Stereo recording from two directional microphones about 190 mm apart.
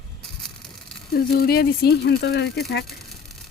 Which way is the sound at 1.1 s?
55° left (ahead or behind).